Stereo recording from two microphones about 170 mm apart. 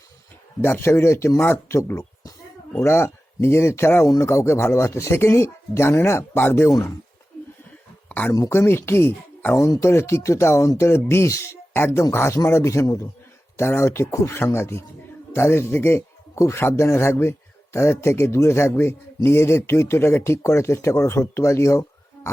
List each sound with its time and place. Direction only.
0.6 s a man's voice: 15° left (ahead or behind)
8.1 s a man's voice: 15° left (ahead or behind)